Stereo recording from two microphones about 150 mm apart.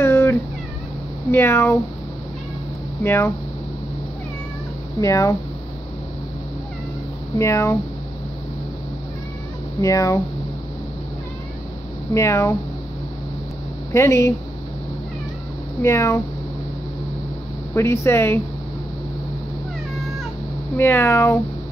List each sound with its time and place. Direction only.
0.0 s cat: 15° left (ahead or behind)
1.3 s speech: 15° left (ahead or behind)
3.0 s speech: 15° left (ahead or behind)
5.0 s speech: 20° left (ahead or behind)
7.3 s speech: 20° left (ahead or behind)
9.8 s speech: 20° left (ahead or behind)
12.1 s speech: 20° left (ahead or behind)
13.9 s speech: 20° left (ahead or behind)
15.8 s speech: 20° left (ahead or behind)
17.7 s speech: 20° left (ahead or behind)
20.7 s speech: 15° left (ahead or behind)